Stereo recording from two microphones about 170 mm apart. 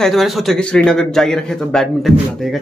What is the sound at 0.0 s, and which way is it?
A man's voice, centre (ahead or behind).